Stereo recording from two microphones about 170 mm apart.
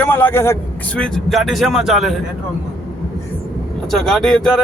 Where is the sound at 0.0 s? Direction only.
10° left (ahead or behind).